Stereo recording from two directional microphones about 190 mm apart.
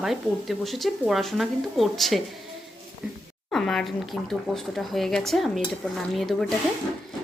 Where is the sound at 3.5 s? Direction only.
5° left (ahead or behind).